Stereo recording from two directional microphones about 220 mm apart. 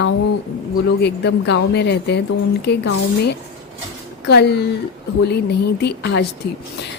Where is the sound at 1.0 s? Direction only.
50° left (ahead or behind).